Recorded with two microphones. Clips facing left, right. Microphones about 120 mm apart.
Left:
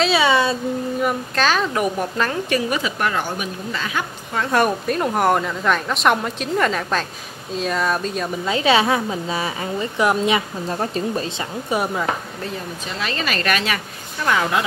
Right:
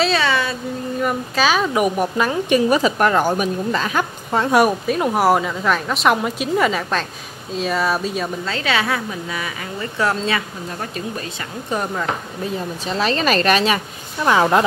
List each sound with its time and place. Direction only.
0.2 s speech: 20° left (ahead or behind)
1.0 s speech: 5° right (ahead or behind)
2.7 s a woman's voice: 40° right (ahead or behind)
4.5 s a woman's voice: 10° right (ahead or behind)
8.5 s a woman's voice: 20° left (ahead or behind)
9.9 s speech: 15° left (ahead or behind)
10.7 s speech: 30° left (ahead or behind)
11.7 s speech: 5° left (ahead or behind)
13.0 s a woman's voice: 35° right (ahead or behind)